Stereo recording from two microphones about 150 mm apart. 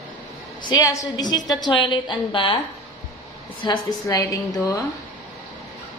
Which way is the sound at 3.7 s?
20° left (ahead or behind).